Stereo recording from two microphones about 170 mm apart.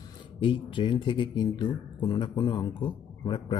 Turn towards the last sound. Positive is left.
turn(degrees=30)  # may be behind; listen again after turning